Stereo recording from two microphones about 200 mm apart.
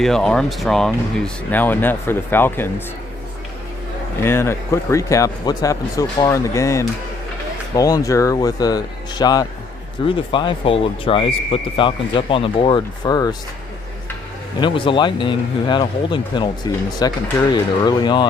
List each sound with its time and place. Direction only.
0.0 s speech: 5° left (ahead or behind)
4.2 s speech: 10° left (ahead or behind)
14.6 s speech: 25° left (ahead or behind)